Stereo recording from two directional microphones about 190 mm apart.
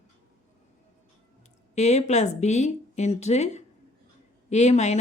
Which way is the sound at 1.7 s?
35° left (ahead or behind).